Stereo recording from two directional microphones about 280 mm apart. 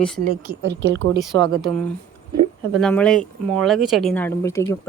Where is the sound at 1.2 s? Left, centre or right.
Centre.